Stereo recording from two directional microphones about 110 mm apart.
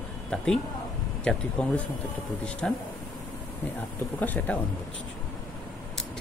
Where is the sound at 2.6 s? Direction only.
10° left (ahead or behind).